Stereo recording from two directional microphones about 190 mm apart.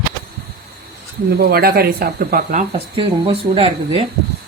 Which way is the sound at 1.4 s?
55° right (ahead or behind).